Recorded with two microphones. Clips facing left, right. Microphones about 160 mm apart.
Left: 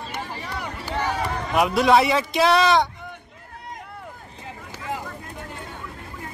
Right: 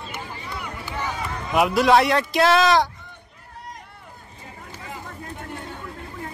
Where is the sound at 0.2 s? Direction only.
30° left (ahead or behind).